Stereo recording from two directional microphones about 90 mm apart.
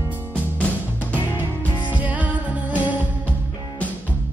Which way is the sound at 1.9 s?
15° right (ahead or behind).